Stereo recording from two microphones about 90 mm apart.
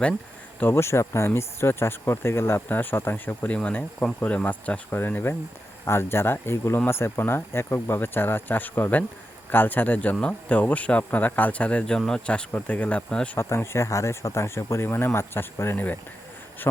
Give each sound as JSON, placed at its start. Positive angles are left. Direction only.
{"t": 0.6, "sound": "speech", "side_deg": 30}
{"t": 13.3, "sound": "speech", "side_deg": 30}